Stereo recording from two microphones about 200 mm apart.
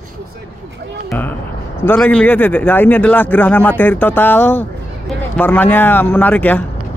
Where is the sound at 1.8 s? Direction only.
10° left (ahead or behind).